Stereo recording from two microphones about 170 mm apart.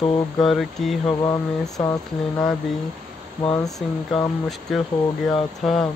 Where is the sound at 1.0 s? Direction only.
20° left (ahead or behind).